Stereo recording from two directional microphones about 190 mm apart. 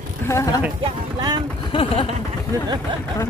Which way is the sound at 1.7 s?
30° left (ahead or behind).